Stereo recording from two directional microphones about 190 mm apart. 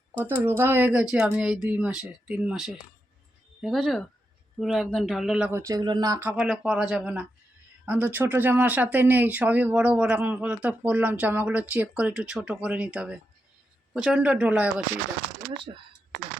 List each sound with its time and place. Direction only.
0.3 s speech: 10° right (ahead or behind)
15.5 s speech: 25° right (ahead or behind)